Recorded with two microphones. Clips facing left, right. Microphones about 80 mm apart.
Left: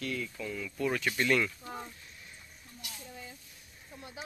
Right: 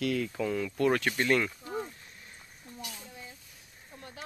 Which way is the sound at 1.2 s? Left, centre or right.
Right.